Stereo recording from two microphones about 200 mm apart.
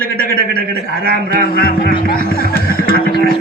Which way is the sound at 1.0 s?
50° right (ahead or behind).